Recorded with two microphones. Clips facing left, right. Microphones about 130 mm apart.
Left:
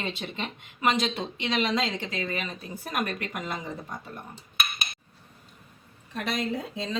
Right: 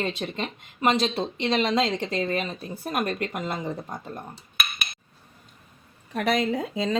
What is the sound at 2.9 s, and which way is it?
Speech, 30° right (ahead or behind).